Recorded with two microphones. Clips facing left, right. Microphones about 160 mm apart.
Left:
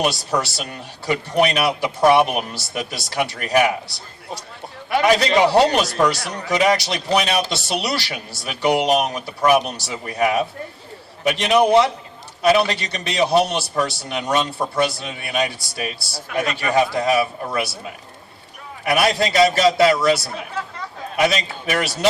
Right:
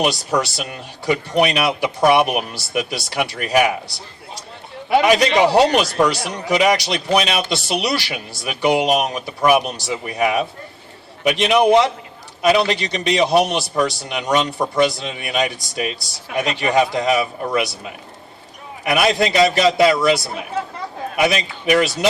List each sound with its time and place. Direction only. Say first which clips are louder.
0.0 s a man's voice: right 2 dB; 15° right (ahead or behind)
18.9 s a man's voice: right 1 dB; 15° right (ahead or behind)